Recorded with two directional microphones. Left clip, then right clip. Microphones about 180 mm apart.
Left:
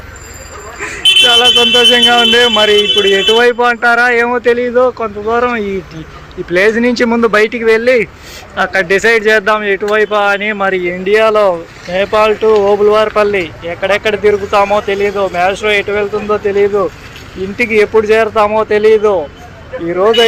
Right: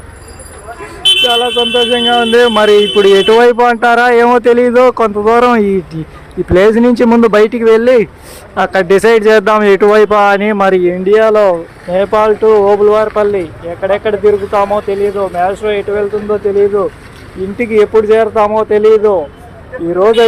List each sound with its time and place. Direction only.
1.3 s speech: centre (ahead or behind); by 4.5 s 30° right (ahead or behind)
4.5 s speech: 45° right (ahead or behind)
4.9 s speech: 30° right (ahead or behind)
6.5 s speech: 30° right (ahead or behind)
7.4 s speech: 35° right (ahead or behind)
9.6 s speech: 40° right (ahead or behind); by 20.2 s 15° right (ahead or behind)